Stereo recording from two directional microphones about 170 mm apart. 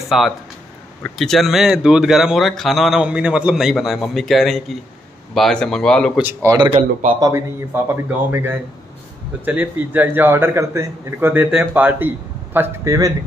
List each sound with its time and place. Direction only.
0.1 s speech: centre (ahead or behind)
6.2 s speech: 20° right (ahead or behind)
6.7 s speech: 45° right (ahead or behind)
7.2 s a man's voice: 15° right (ahead or behind)